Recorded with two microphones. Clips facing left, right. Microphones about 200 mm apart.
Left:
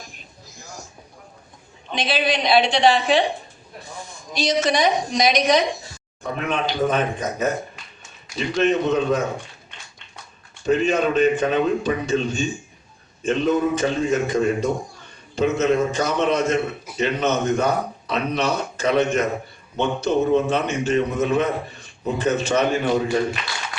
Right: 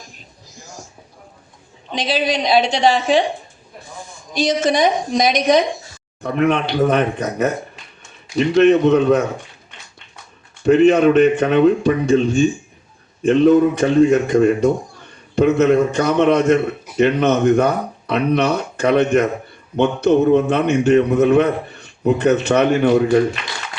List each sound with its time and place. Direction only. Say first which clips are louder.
2.0 s a woman's voice: right 3 dB; 40° right (ahead or behind)
4.4 s a woman's voice: right 4 dB; 50° right (ahead or behind)
6.2 s a man's voice: right 7 dB; 65° right (ahead or behind)
8.6 s a man's voice: right 6 dB; 65° right (ahead or behind)
10.7 s a man's voice: right 8 dB; 65° right (ahead or behind)